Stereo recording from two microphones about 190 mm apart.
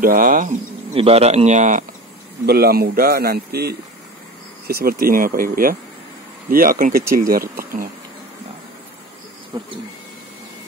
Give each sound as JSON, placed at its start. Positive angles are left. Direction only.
{"t": 0.0, "sound": "speech", "side_deg": -45}
{"t": 0.9, "sound": "speech", "side_deg": -30}
{"t": 2.4, "sound": "a man's voice", "side_deg": -55}
{"t": 9.5, "sound": "speech", "side_deg": -25}